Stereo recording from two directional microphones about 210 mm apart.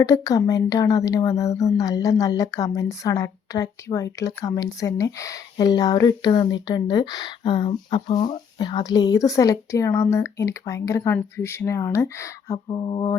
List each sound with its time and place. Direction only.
0.0 s speech: 15° left (ahead or behind)